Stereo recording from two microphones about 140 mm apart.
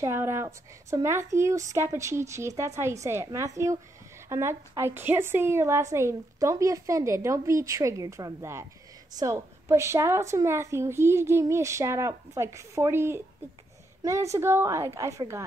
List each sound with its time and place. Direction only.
0.0 s a woman's voice: 20° right (ahead or behind)